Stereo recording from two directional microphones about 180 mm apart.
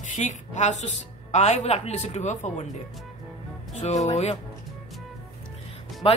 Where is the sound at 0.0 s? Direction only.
40° left (ahead or behind).